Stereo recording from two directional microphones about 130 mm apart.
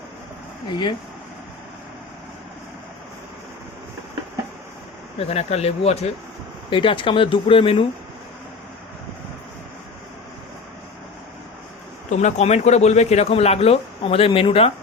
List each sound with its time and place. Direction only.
5.1 s speech: 50° left (ahead or behind)
6.7 s speech: 40° left (ahead or behind)
12.1 s speech: 60° left (ahead or behind)